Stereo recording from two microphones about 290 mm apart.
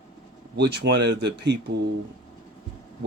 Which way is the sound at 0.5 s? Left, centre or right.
Right.